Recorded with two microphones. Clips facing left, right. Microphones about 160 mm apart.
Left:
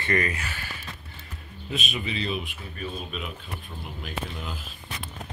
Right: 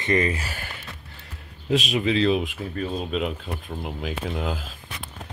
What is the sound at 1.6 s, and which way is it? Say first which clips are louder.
Speech: right 10 dB; 90° right.